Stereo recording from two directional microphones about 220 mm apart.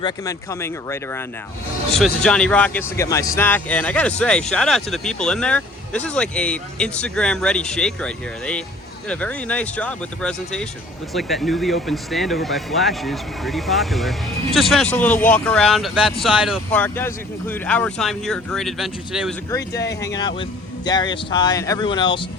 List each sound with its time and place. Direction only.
0.0 s speech: 15° left (ahead or behind); by 19.3 s centre (ahead or behind)
19.5 s speech: 15° left (ahead or behind)